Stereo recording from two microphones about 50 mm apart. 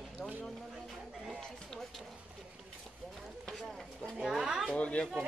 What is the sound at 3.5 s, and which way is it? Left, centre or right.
Speech, centre.